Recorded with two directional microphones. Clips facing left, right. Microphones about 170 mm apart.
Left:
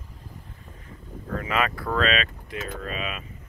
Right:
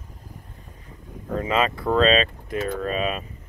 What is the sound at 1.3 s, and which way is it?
Speech, 25° right (ahead or behind).